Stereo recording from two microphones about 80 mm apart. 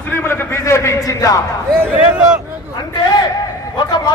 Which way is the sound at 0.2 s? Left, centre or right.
Left.